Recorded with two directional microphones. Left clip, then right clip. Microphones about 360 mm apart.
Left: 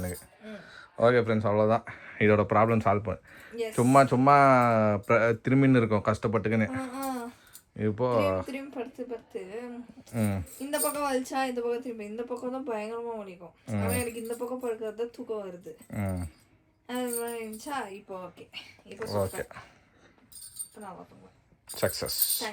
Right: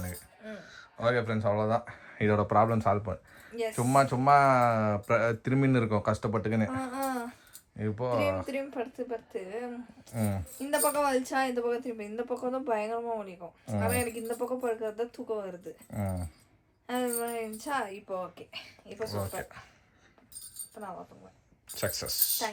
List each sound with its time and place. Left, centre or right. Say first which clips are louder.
0.0 s speech: left 4 dB; centre
21.7 s speech: left 4 dB; centre